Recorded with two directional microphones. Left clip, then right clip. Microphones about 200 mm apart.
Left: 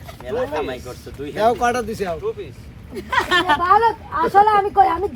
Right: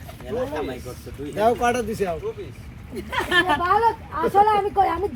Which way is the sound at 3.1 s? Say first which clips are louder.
Left 3 dB; 10° left (ahead or behind).